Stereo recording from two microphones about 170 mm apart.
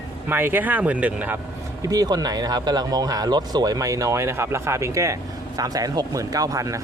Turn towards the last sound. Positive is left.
turn(degrees=-20)  # may be behind; listen again after turning